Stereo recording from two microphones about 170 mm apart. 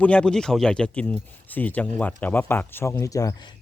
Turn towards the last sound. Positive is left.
turn(degrees=20)  # may be behind; listen again after turning